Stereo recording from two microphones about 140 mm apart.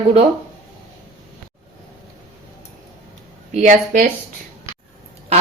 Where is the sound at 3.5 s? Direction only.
60° right (ahead or behind).